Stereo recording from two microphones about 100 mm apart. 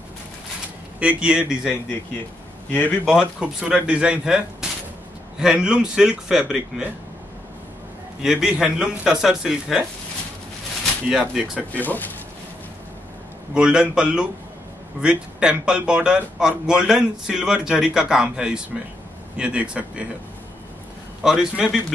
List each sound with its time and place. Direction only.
0.9 s speech: 10° right (ahead or behind)
2.7 s speech: 20° left (ahead or behind)
3.1 s speech: 10° right (ahead or behind)
8.2 s a man's voice: 5° right (ahead or behind)
11.1 s speech: 5° right (ahead or behind)
11.7 s speech: 15° left (ahead or behind)
13.6 s speech: 10° right (ahead or behind)
21.2 s speech: 5° right (ahead or behind)